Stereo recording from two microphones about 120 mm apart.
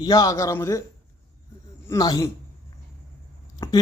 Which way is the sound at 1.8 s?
30° left (ahead or behind).